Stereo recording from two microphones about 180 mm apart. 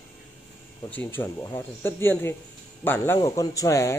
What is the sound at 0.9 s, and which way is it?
Speech, 10° left (ahead or behind).